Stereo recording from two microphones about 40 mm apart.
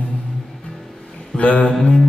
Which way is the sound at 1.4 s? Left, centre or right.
Left.